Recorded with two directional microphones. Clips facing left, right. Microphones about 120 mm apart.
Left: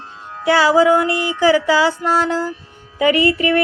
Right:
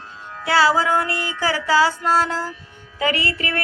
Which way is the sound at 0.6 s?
15° left (ahead or behind).